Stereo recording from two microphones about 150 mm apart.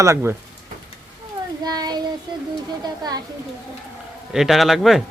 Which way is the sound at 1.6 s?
25° right (ahead or behind).